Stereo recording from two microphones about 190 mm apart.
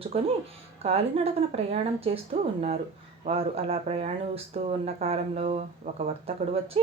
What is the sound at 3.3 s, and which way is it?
Speech, 30° right (ahead or behind).